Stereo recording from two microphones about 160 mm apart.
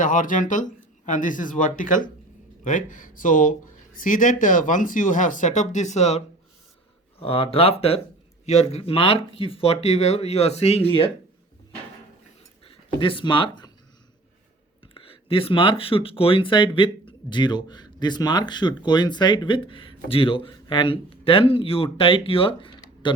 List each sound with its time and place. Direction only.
0.0 s speech: 55° left (ahead or behind)
12.6 s speech: 35° left (ahead or behind)
14.9 s speech: 35° left (ahead or behind)